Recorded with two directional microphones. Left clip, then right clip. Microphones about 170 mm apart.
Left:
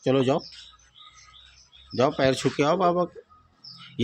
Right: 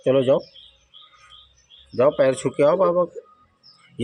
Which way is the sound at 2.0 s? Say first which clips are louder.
Right 5 dB; 15° left (ahead or behind).